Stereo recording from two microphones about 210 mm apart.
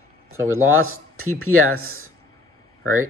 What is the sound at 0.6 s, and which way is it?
Speech, 80° right.